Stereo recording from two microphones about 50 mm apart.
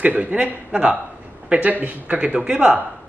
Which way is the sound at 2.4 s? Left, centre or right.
Centre.